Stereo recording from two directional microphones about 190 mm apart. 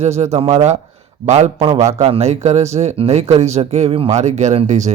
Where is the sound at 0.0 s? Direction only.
35° right (ahead or behind).